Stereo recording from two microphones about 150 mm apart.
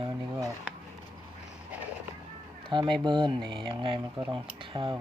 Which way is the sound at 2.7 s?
30° right (ahead or behind).